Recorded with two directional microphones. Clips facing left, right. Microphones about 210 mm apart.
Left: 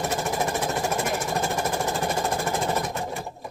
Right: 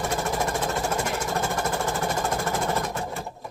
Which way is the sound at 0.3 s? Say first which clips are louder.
Even; 15° left (ahead or behind).